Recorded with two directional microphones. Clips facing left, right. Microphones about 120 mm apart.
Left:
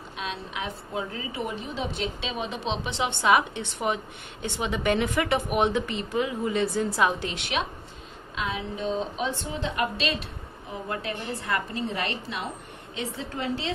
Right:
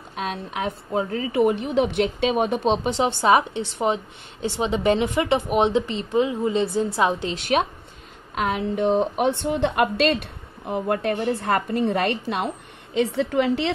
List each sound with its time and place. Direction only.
0.1 s a woman's voice: 50° right (ahead or behind); by 7.3 s 30° right (ahead or behind)
7.3 s a woman's voice: 45° right (ahead or behind)
8.4 s a woman's voice: 60° right (ahead or behind); by 13.7 s 85° right